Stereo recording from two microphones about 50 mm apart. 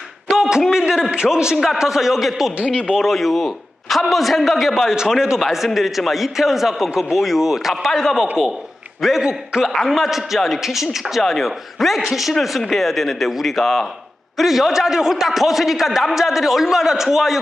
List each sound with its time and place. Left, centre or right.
0.3 s a sound: centre
1.1 s a man's voice: centre
2.6 s speech: left
2.9 s a man's voice: centre